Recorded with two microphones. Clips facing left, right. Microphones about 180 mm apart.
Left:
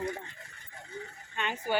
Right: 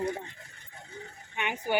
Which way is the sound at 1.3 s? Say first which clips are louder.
Right 1 dB; 15° right (ahead or behind).